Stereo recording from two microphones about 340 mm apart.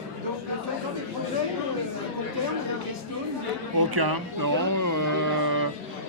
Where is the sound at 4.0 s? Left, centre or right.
Right.